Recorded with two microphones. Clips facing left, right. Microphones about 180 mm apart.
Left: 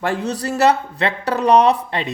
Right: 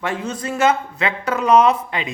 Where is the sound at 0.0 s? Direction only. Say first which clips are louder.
Left 3 dB; 35° left (ahead or behind).